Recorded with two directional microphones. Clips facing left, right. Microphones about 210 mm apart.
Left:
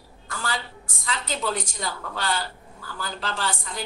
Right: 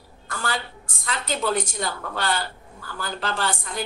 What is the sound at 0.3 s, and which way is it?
A woman's voice, 60° right (ahead or behind).